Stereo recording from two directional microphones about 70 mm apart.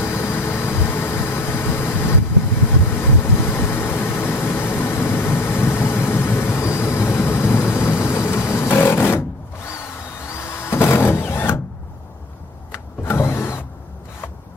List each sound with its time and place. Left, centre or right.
0.0 s vehicle: left
10.3 s tools: left
12.7 s power windows: left